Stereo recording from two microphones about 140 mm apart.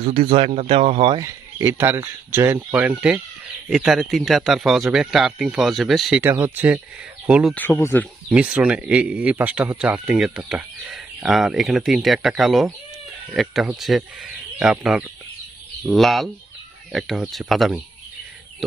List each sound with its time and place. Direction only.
0.0 s speech: 45° right (ahead or behind)
1.1 s speech: 25° right (ahead or behind); by 6.2 s centre (ahead or behind)
6.2 s speech: 15° right (ahead or behind)
7.5 s speech: 15° left (ahead or behind)
8.3 s speech: 10° right (ahead or behind)